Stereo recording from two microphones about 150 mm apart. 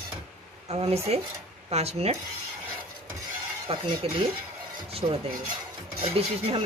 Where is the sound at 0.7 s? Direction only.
45° right (ahead or behind).